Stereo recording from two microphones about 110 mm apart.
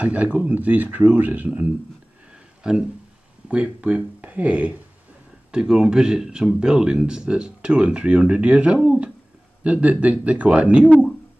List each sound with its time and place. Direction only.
0.0 s speech: 15° right (ahead or behind)
8.8 s a sound: 10° right (ahead or behind)
9.6 s speech: 10° right (ahead or behind)